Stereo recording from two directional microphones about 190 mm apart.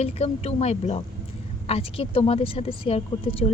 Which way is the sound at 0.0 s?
35° left (ahead or behind).